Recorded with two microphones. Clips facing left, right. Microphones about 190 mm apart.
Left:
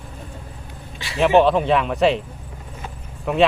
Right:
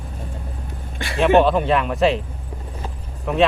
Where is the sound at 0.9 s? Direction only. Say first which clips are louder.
Right 4 dB; 55° right (ahead or behind).